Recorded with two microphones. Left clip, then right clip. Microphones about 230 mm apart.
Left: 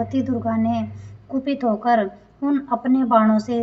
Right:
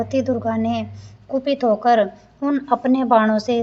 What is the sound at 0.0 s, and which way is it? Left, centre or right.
A woman's voice, right.